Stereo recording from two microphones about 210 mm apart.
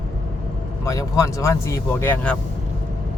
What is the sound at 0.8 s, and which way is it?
Speech, 15° left (ahead or behind).